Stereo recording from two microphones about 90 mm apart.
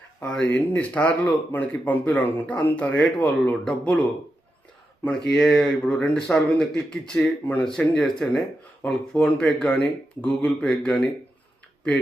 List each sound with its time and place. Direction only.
0.3 s speech: 15° left (ahead or behind)
5.1 s speech: 5° left (ahead or behind)